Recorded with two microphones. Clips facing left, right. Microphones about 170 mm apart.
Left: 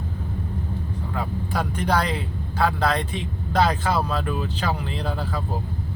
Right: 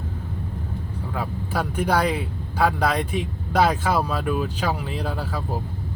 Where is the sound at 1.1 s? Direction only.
5° right (ahead or behind).